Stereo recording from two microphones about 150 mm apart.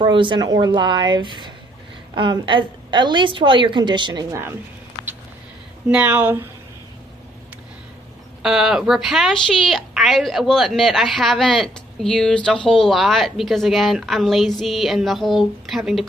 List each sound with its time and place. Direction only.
0.0 s a woman's voice: 30° right (ahead or behind)
5.9 s speech: 10° right (ahead or behind)
8.4 s a woman's voice: 5° right (ahead or behind)